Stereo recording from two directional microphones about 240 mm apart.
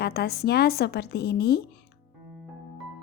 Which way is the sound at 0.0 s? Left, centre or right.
Left.